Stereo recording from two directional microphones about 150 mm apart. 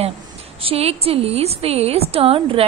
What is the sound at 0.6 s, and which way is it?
A woman's voice, 40° right (ahead or behind).